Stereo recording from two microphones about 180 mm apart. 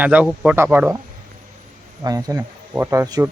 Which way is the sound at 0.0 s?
10° right (ahead or behind).